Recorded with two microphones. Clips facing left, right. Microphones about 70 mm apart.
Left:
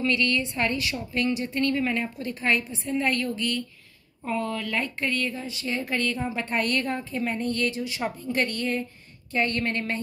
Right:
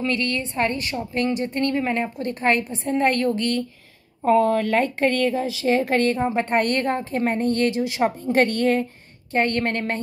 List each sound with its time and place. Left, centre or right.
0.0 s a woman's voice: right
2.1 s a woman's voice: right
7.7 s a woman's voice: right